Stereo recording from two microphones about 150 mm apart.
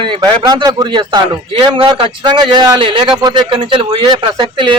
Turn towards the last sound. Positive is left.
turn(degrees=-30)  # may be behind; listen again after turning